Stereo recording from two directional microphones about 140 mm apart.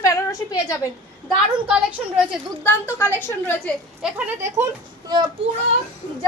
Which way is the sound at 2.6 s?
15° left (ahead or behind).